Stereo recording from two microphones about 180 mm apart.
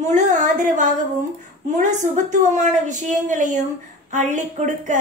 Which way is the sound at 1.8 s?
45° right (ahead or behind).